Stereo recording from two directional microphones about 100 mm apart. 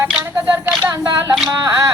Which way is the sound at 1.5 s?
35° right (ahead or behind).